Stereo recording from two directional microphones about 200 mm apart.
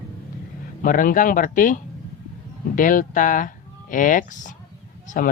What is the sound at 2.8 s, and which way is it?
Speech, 40° left (ahead or behind).